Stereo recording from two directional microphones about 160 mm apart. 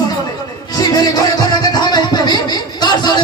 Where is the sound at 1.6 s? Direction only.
25° left (ahead or behind).